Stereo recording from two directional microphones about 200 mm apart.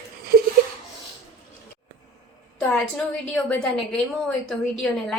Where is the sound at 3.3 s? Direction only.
Centre (ahead or behind).